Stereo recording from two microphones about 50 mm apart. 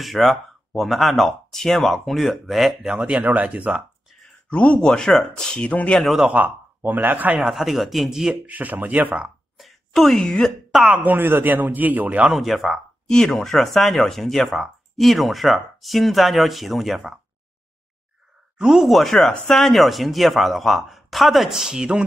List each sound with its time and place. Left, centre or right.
0.0 s speech: centre
3.0 s speech: right
4.5 s speech: left
5.6 s speech: left
5.9 s speech: centre
6.3 s speech: right
7.5 s speech: centre
8.5 s a man's voice: right
9.6 s a sound: centre
10.7 s speech: centre
11.1 s a man's voice: right
12.3 s speech: centre
18.6 s speech: centre
18.9 s speech: centre